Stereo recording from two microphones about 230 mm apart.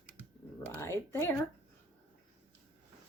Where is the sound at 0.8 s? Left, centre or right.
Centre.